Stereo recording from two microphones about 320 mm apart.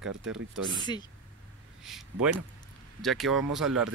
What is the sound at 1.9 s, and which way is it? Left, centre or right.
Speech, centre.